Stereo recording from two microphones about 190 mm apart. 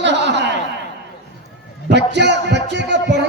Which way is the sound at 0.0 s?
65° right (ahead or behind).